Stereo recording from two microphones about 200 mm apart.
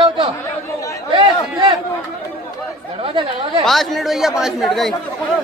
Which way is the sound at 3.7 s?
Centre (ahead or behind).